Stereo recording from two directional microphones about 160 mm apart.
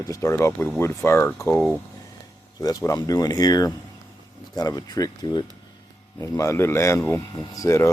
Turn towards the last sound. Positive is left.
turn(degrees=20)  # may be behind; listen again after turning